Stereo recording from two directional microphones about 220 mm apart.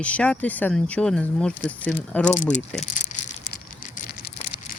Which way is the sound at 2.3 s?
30° left (ahead or behind).